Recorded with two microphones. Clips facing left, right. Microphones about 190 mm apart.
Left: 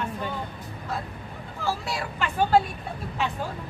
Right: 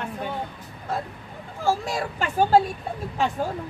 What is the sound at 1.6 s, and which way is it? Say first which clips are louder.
Speech: right 5 dB; 45° right (ahead or behind).